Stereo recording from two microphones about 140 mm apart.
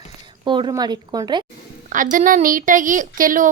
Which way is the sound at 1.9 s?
70° right (ahead or behind).